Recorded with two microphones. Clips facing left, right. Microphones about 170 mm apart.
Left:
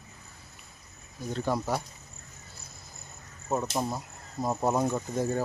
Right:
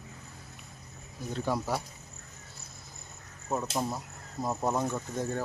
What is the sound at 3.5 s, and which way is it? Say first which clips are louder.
Speech: left 2 dB; 5° left (ahead or behind).